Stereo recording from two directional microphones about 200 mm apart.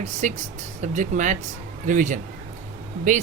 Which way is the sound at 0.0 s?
35° right (ahead or behind).